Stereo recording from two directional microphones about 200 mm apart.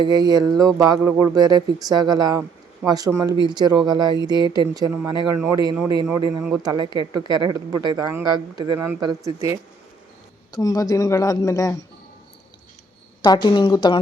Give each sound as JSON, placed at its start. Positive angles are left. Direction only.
{"t": 0.0, "sound": "speech", "side_deg": -20}
{"t": 10.5, "sound": "speech", "side_deg": 20}
{"t": 13.2, "sound": "a woman's voice", "side_deg": 20}